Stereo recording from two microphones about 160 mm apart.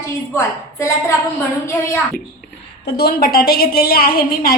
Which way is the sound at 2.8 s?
80° left.